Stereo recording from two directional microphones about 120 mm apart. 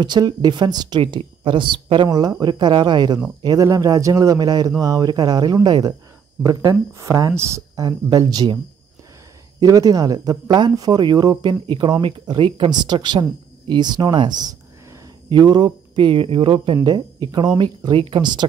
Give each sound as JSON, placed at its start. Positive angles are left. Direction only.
{"t": 0.0, "sound": "speech", "side_deg": -35}
{"t": 9.6, "sound": "speech", "side_deg": -30}